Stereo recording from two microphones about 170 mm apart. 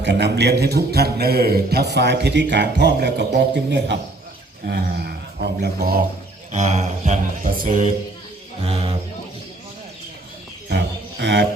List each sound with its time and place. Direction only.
0.0 s a man's voice: 85° right
4.6 s a man's voice: 65° right (ahead or behind)
6.5 s a man's voice: 45° right (ahead or behind)
8.6 s speech: 35° right (ahead or behind)
11.2 s speech: 90° right